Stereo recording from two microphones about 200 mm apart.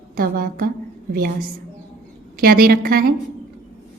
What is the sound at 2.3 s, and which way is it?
Speech, 45° right (ahead or behind).